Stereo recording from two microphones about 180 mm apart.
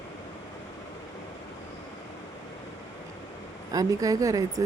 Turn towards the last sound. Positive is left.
turn(degrees=-20)  # may be behind; listen again after turning